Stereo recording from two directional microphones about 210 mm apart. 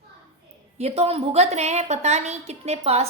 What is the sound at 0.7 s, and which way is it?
A woman's voice, 30° right (ahead or behind).